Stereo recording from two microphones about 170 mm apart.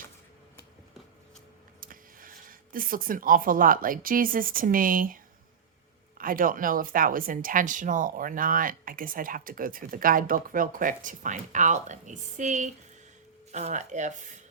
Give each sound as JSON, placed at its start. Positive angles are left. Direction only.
{"t": 1.8, "sound": "a woman's voice", "side_deg": -55}